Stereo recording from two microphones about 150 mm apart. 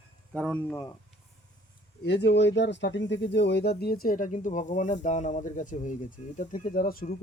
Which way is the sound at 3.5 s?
90° left.